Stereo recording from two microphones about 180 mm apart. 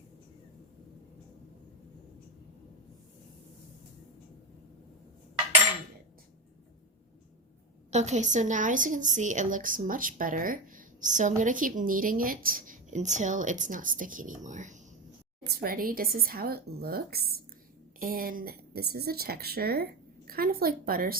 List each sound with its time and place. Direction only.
7.9 s a woman's voice: 40° right (ahead or behind); by 21.2 s 55° right (ahead or behind)